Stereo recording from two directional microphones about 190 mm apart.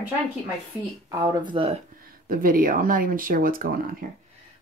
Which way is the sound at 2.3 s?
50° right (ahead or behind).